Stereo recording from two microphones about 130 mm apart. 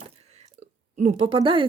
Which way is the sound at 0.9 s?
60° right (ahead or behind).